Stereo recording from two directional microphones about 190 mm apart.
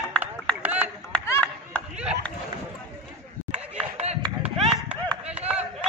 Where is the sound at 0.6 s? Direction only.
10° right (ahead or behind).